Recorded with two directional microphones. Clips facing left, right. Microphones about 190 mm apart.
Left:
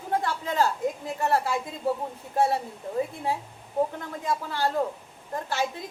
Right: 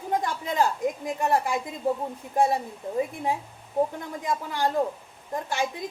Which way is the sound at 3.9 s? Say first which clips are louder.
Even; 15° right (ahead or behind).